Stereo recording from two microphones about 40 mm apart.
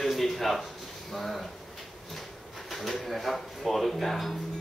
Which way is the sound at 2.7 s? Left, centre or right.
Centre.